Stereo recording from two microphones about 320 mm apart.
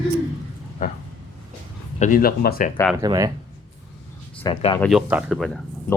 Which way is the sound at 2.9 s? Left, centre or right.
Centre.